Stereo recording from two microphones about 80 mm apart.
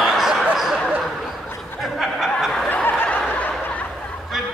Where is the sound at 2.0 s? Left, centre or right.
Centre.